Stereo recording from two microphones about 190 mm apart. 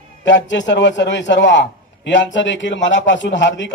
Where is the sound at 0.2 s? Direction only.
70° left (ahead or behind).